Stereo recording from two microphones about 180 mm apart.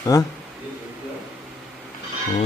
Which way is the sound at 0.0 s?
20° left (ahead or behind).